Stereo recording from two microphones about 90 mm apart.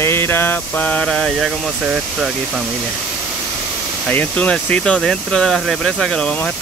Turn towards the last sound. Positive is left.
turn(degrees=15)  # may be behind; listen again after turning